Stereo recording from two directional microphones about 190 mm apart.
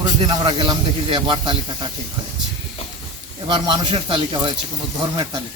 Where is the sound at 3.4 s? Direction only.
25° right (ahead or behind).